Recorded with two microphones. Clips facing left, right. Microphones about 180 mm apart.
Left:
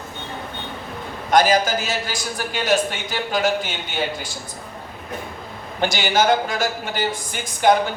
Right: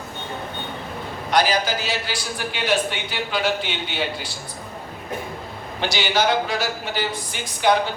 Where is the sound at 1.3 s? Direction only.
45° left (ahead or behind).